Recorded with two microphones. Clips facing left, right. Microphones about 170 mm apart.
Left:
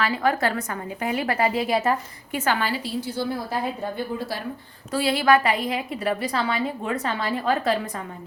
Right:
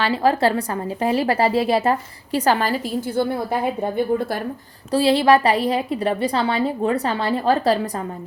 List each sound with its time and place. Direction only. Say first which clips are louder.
0.0 s a woman's voice: right 5 dB; 30° right (ahead or behind); by 4.3 s 55° right (ahead or behind)
4.9 s a woman's voice: right 5 dB; 30° right (ahead or behind)